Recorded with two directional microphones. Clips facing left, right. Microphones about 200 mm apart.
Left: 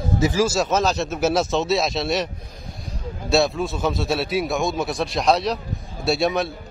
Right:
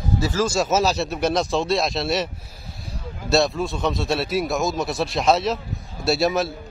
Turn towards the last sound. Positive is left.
turn(degrees=0)  # may be behind; listen again after turning